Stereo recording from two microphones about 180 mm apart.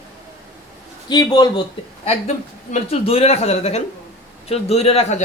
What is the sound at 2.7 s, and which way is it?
Speech, 35° left (ahead or behind).